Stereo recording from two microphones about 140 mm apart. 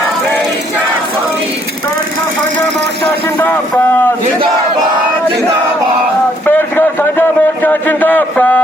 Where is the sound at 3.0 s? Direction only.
15° left (ahead or behind).